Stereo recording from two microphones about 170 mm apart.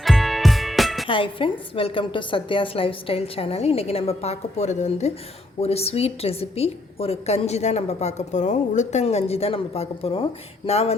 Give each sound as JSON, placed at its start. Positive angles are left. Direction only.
{"t": 0.0, "sound": "music", "side_deg": 0}
{"t": 1.0, "sound": "a woman's voice", "side_deg": 30}